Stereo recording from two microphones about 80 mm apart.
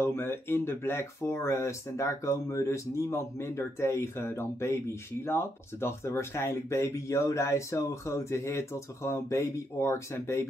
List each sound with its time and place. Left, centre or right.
0.0 s speech: left